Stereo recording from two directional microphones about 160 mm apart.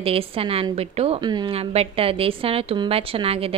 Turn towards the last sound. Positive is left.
turn(degrees=-35)  # may be behind; listen again after turning